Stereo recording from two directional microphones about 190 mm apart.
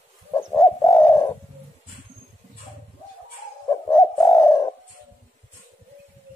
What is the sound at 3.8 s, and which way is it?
Bird, 15° left (ahead or behind).